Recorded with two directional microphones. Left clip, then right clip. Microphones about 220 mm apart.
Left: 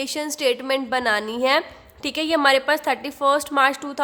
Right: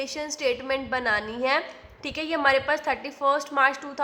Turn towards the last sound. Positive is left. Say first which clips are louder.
# left 3 dB
turn(degrees=60)  # may be behind; listen again after turning